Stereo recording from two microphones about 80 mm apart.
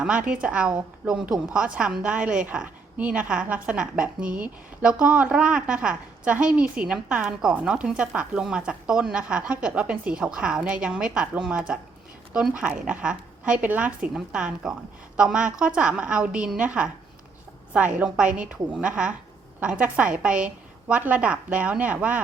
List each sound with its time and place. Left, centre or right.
0.0 s a woman's voice: centre
14.1 s a woman's voice: centre